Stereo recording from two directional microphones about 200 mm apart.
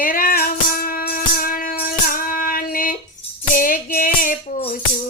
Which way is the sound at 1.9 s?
45° left (ahead or behind).